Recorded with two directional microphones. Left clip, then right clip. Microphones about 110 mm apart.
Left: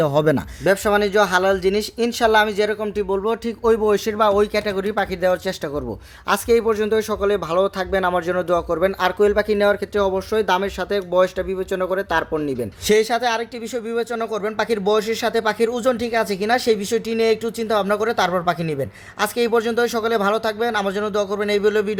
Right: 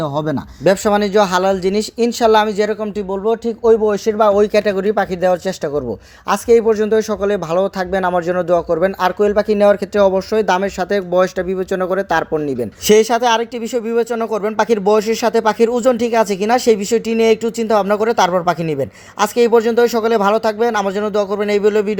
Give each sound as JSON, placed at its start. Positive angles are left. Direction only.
{"t": 0.0, "sound": "speech", "side_deg": 30}
{"t": 0.6, "sound": "speech", "side_deg": -30}
{"t": 3.1, "sound": "speech", "side_deg": -10}
{"t": 6.2, "sound": "speech", "side_deg": -15}